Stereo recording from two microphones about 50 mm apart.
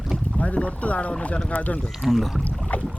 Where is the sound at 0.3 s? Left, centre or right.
Left.